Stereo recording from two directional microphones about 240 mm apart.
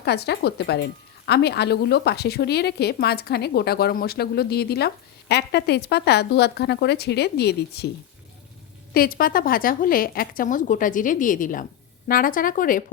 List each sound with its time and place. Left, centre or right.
0.0 s a woman's voice: left
8.9 s a woman's voice: left